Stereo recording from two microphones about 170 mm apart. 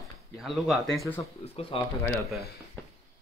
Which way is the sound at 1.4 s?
35° left (ahead or behind).